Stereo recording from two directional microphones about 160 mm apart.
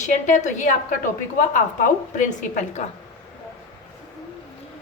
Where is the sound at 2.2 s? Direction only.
50° left (ahead or behind).